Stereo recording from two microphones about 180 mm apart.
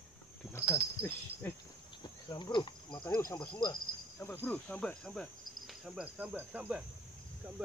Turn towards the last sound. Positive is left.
turn(degrees=-10)  # may be behind; listen again after turning